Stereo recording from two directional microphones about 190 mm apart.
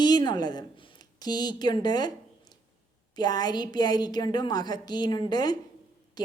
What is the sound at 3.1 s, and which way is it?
A woman's voice, 20° left (ahead or behind).